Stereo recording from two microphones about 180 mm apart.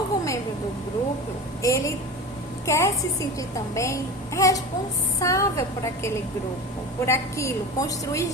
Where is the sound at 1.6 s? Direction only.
20° left (ahead or behind).